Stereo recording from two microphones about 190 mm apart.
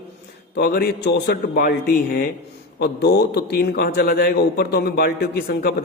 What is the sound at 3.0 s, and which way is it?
A man's voice, 60° left (ahead or behind).